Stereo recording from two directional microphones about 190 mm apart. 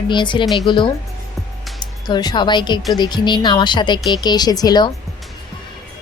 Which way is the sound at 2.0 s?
25° left (ahead or behind).